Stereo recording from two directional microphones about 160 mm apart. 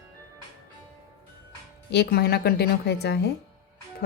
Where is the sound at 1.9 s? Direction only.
85° left.